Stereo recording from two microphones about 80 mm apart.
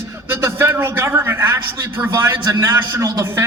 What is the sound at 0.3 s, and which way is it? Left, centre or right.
A man's voice, right.